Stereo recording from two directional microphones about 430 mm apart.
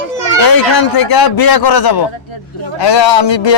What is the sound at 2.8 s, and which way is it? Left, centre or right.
Speech, left.